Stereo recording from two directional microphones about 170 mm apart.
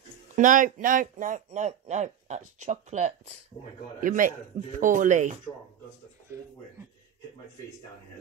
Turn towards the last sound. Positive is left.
turn(degrees=-15)  # may be behind; listen again after turning